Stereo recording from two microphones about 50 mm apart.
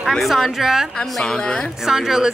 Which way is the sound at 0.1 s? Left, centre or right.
Centre.